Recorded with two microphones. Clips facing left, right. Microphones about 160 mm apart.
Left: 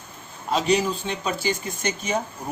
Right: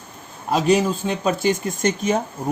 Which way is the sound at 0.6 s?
50° right (ahead or behind).